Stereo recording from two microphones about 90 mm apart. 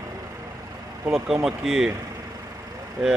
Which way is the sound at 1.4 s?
5° right (ahead or behind).